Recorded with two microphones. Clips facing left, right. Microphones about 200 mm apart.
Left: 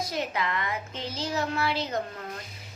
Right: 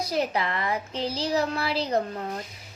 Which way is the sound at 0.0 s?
35° right (ahead or behind).